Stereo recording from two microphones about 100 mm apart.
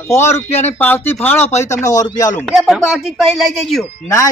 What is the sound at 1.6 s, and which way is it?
Speech, 35° left (ahead or behind).